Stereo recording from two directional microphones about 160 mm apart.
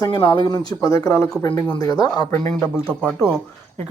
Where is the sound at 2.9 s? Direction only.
5° left (ahead or behind).